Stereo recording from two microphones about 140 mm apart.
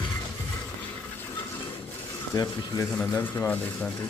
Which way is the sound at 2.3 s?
25° left (ahead or behind).